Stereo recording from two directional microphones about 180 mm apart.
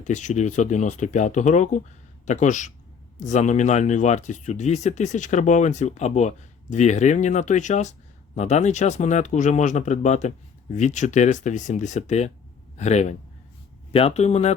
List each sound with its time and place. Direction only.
0.0 s speech: 45° left (ahead or behind)